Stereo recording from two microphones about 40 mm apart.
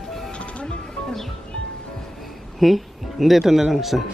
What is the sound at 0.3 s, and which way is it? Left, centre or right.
Music, left.